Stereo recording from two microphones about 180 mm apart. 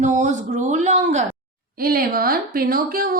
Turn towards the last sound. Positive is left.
turn(degrees=-55)  # may be behind; listen again after turning